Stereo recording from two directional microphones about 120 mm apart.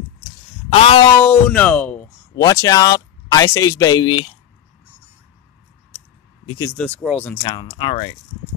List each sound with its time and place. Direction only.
0.7 s speech: 55° left (ahead or behind)
1.2 s speech: 15° left (ahead or behind)
2.3 s speech: 30° left (ahead or behind)
6.8 s speech: 5° left (ahead or behind)
7.4 s speech: 45° left (ahead or behind)